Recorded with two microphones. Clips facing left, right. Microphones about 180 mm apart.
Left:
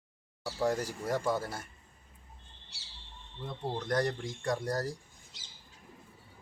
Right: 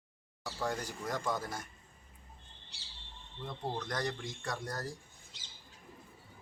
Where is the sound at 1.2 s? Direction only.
5° left (ahead or behind).